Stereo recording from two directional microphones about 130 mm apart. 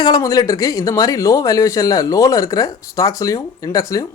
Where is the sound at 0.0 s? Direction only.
30° left (ahead or behind).